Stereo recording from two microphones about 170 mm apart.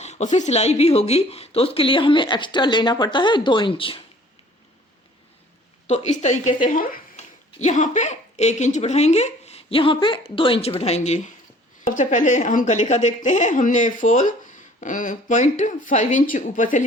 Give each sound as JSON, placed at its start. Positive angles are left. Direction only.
{"t": 0.0, "sound": "speech", "side_deg": 40}
{"t": 5.9, "sound": "a woman's voice", "side_deg": 40}